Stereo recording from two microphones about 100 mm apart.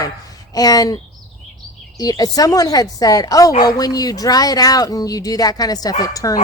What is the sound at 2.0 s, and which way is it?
Speech, 35° left (ahead or behind).